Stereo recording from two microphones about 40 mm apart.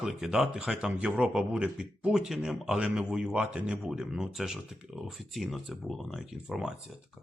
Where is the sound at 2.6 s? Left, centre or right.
Right.